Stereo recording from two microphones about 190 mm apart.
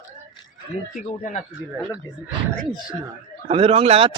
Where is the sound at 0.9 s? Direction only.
40° left (ahead or behind).